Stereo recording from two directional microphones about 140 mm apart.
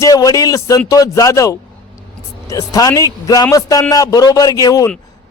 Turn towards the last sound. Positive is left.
turn(degrees=25)  # may be behind; listen again after turning